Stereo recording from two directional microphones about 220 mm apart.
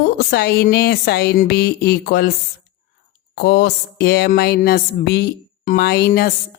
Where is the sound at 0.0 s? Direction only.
45° left (ahead or behind).